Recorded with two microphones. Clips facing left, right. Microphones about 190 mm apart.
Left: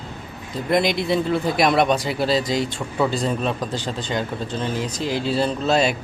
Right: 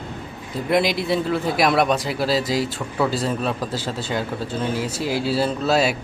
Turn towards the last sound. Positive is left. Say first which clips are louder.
# even
turn(degrees=-5)  # may be behind; listen again after turning